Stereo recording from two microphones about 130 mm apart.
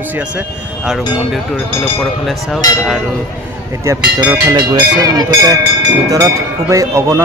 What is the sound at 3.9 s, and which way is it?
Speech, 20° right (ahead or behind).